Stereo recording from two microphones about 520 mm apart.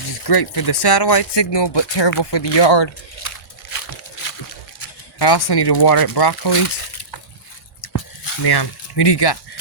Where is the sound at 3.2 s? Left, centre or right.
Left.